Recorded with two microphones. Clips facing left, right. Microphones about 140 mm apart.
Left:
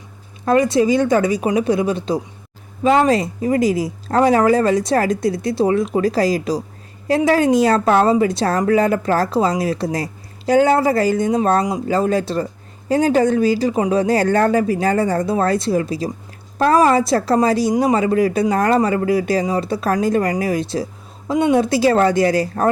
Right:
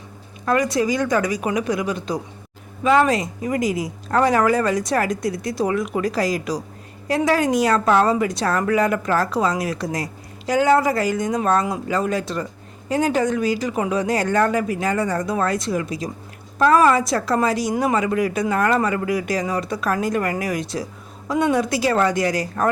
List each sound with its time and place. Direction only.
0.4 s a woman's voice: 25° left (ahead or behind)